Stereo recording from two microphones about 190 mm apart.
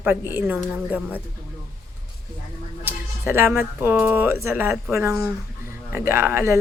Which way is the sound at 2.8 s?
10° right (ahead or behind).